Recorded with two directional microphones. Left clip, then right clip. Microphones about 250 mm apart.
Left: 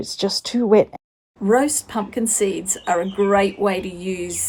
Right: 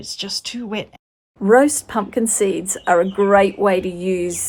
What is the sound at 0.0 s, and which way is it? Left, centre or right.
A woman's voice, right.